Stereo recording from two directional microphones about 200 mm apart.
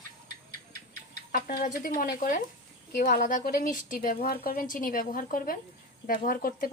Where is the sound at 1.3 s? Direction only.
45° left (ahead or behind).